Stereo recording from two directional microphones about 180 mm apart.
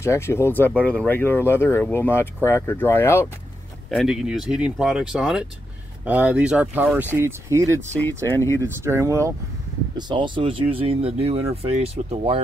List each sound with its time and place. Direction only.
0.0 s speech: 15° left (ahead or behind)
3.9 s speech: centre (ahead or behind)
8.0 s speech: 15° left (ahead or behind)
8.8 s speech: 15° right (ahead or behind); by 12.4 s 35° right (ahead or behind)